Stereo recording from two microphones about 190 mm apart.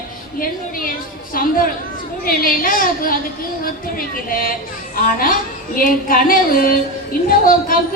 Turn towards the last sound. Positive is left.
turn(degrees=45)  # may be behind; listen again after turning